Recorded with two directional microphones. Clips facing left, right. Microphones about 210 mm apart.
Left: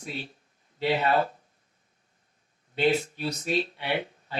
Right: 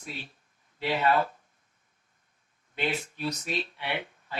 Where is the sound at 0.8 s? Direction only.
30° left (ahead or behind).